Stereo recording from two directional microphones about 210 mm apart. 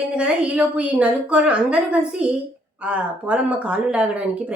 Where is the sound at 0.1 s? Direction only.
5° right (ahead or behind).